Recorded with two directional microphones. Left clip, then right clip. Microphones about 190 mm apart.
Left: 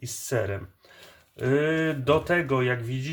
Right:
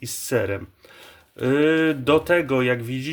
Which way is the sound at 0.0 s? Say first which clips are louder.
Right 5 dB; 35° right (ahead or behind).